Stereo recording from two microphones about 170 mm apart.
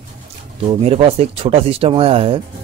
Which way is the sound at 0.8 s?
35° right (ahead or behind).